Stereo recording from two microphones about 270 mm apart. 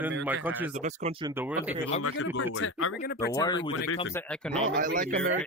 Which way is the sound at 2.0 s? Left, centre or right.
Left.